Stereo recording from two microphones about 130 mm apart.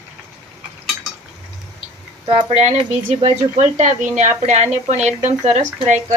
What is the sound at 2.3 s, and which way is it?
Speech, 55° right (ahead or behind).